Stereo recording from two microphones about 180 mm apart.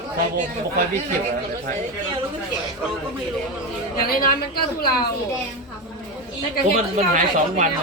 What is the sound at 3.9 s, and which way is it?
Speech, 55° left (ahead or behind).